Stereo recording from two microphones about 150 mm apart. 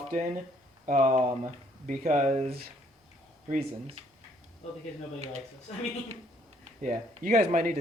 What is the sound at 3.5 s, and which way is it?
Speech, 45° right (ahead or behind).